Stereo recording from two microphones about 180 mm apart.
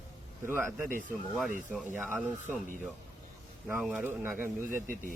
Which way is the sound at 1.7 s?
10° right (ahead or behind).